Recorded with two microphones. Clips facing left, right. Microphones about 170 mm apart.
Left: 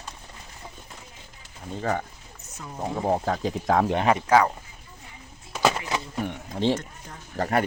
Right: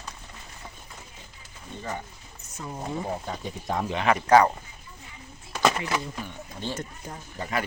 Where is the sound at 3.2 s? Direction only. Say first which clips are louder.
Left 8 dB; 90° left.